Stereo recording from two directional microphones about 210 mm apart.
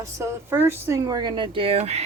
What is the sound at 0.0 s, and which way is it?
Speech, 15° right (ahead or behind).